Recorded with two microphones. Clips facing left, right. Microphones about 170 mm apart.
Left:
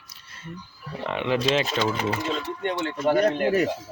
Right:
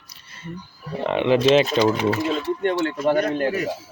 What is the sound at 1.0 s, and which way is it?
Speech, 25° right (ahead or behind).